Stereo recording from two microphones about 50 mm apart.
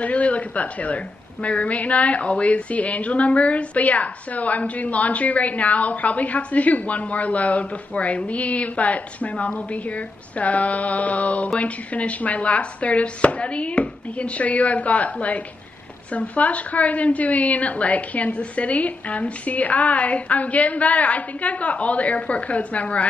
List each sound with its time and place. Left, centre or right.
0.0 s a woman's voice: left